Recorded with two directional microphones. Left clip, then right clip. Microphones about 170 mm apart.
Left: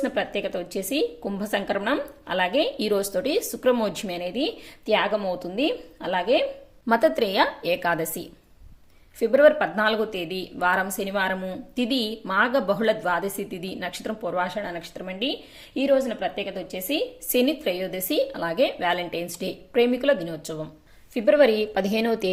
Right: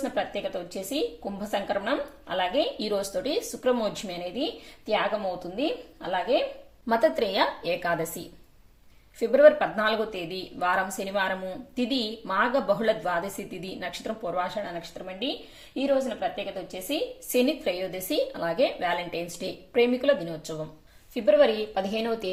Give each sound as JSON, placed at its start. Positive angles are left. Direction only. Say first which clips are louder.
{"t": 0.0, "sound": "speech", "louder": "left 3 dB", "side_deg": 45}
{"t": 6.8, "sound": "a woman's voice", "louder": "left 3 dB", "side_deg": 30}